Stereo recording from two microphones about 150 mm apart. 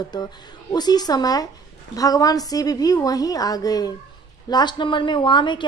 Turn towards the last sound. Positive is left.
turn(degrees=30)  # may be behind; listen again after turning